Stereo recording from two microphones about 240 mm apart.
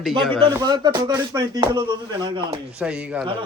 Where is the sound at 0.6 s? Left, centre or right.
Centre.